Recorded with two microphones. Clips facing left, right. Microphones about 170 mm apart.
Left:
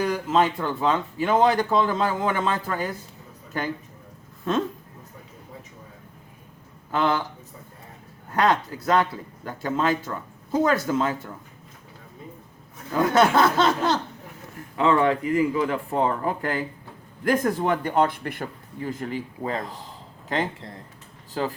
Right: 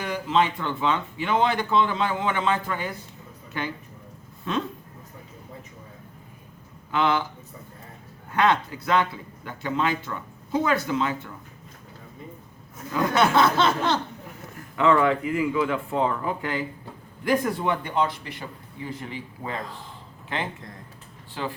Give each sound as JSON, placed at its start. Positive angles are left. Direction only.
{"t": 0.0, "sound": "speech", "side_deg": 40}
{"t": 6.9, "sound": "speech", "side_deg": 40}
{"t": 8.3, "sound": "speech", "side_deg": 40}
{"t": 12.9, "sound": "speech", "side_deg": 40}
{"t": 20.3, "sound": "speech", "side_deg": 35}